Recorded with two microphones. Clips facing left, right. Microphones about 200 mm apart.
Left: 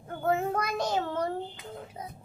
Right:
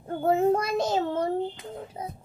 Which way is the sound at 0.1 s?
30° right (ahead or behind).